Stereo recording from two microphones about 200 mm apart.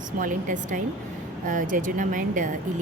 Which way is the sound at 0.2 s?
40° right (ahead or behind).